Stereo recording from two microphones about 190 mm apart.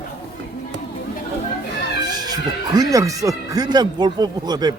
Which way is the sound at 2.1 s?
20° right (ahead or behind).